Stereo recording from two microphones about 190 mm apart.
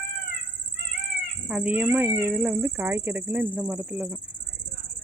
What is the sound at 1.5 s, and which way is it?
Speech, 5° right (ahead or behind).